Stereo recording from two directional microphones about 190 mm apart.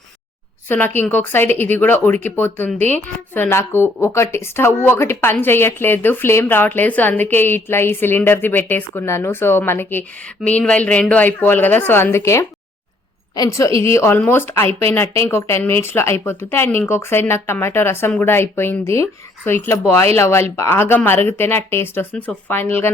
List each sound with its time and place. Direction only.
0.7 s a woman's voice: 10° left (ahead or behind)